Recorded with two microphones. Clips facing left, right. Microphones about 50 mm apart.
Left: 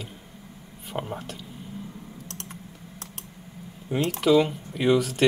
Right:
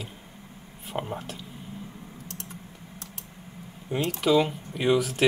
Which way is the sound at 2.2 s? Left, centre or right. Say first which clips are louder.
Left 1 dB; left.